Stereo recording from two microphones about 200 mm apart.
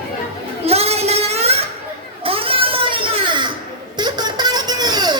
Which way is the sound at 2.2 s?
30° right (ahead or behind).